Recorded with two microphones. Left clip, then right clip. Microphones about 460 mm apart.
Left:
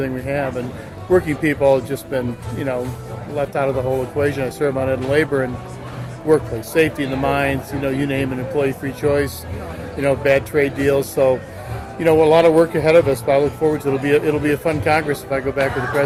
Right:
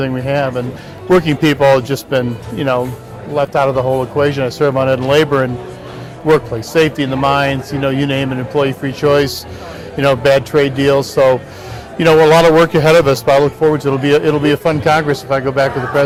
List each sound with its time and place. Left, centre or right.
0.0 s a man's voice: right
1.5 s a man's voice: right
6.7 s a man's voice: right